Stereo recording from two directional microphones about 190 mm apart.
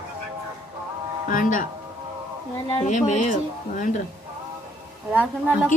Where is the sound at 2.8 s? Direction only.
40° left (ahead or behind).